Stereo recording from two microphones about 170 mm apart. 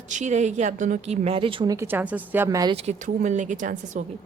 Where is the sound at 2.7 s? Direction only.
40° right (ahead or behind).